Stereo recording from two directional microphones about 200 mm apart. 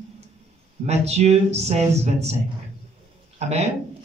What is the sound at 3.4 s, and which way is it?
Speech, 30° right (ahead or behind).